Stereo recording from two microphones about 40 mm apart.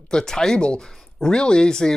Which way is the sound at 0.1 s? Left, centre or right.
Centre.